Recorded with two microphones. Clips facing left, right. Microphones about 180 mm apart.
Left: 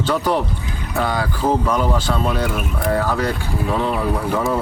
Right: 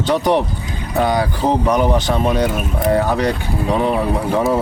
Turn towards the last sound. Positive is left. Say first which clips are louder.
# right 3 dB
turn(degrees=-20)  # may be behind; listen again after turning